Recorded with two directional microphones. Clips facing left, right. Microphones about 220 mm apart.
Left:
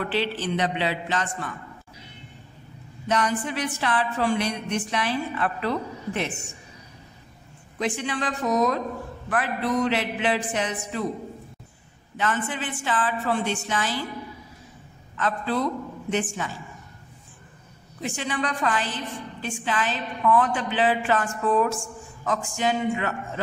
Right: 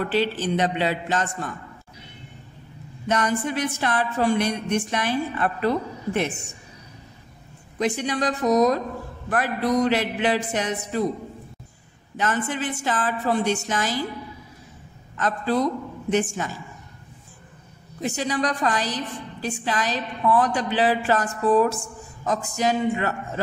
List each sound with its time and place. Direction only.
0.0 s a woman's voice: 45° right (ahead or behind)
3.1 s a woman's voice: 45° right (ahead or behind)
7.8 s a woman's voice: 40° right (ahead or behind)
12.2 s a woman's voice: 40° right (ahead or behind)
15.1 s a man's voice: 40° right (ahead or behind)
18.0 s a woman's voice: 40° right (ahead or behind)